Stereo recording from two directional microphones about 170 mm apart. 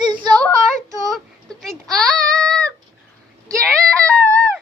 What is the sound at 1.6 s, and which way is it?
Child singing, centre (ahead or behind).